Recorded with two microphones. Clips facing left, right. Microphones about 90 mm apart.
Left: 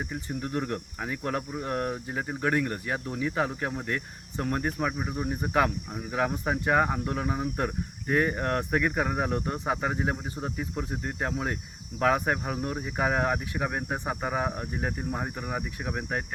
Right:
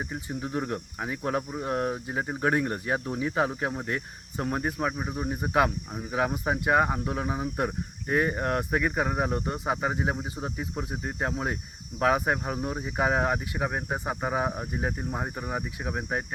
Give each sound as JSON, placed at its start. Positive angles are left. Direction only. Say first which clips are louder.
{"t": 0.0, "sound": "speech", "louder": "even", "side_deg": -10}